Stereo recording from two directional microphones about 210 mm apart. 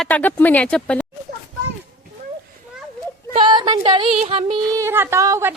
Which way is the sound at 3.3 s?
20° right (ahead or behind).